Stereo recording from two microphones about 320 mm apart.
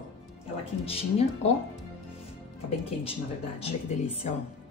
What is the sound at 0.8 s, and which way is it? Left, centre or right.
Speech, centre.